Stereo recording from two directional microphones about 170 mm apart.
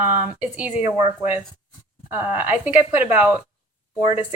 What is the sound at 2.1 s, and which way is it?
Speech, 10° right (ahead or behind).